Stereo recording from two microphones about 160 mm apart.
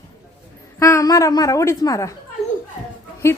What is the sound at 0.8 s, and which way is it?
A woman's voice, 15° left (ahead or behind).